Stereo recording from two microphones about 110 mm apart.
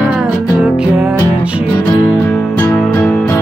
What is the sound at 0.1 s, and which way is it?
Music, 10° right (ahead or behind).